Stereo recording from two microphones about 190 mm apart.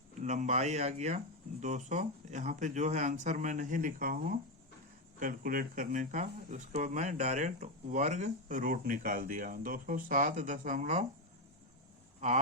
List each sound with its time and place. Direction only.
0.2 s speech: 40° right (ahead or behind)